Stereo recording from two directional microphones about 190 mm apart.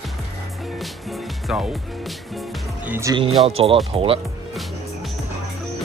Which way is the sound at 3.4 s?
30° right (ahead or behind).